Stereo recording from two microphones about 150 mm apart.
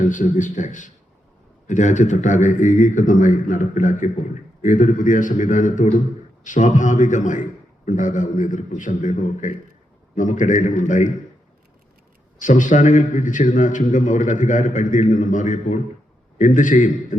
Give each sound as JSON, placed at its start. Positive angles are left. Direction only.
{"t": 0.0, "sound": "a man's voice", "side_deg": 60}
{"t": 12.4, "sound": "a man's voice", "side_deg": 60}